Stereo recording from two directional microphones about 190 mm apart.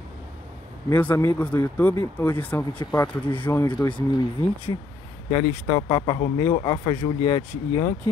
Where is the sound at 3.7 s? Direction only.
25° left (ahead or behind).